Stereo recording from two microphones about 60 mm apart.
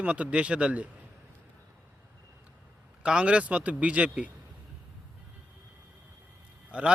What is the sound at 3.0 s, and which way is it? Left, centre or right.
A man's voice, centre.